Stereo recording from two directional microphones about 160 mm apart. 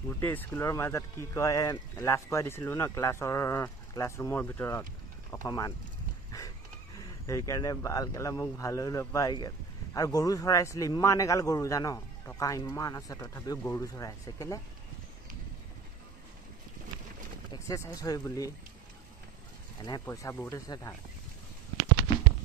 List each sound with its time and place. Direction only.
0.2 s speech: 10° left (ahead or behind)
7.0 s speech: 20° left (ahead or behind)
17.5 s speech: 20° left (ahead or behind)
19.8 s speech: 25° left (ahead or behind)